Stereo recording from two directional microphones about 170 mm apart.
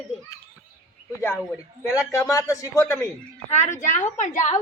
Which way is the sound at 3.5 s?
45° left (ahead or behind).